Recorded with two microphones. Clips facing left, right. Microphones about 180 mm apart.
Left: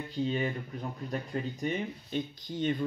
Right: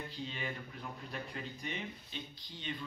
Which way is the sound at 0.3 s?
40° left (ahead or behind).